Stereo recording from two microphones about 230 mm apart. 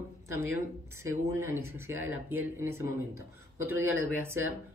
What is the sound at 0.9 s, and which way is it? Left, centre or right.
Speech, centre.